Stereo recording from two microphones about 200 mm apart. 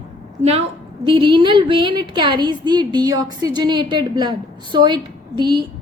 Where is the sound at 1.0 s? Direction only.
25° right (ahead or behind).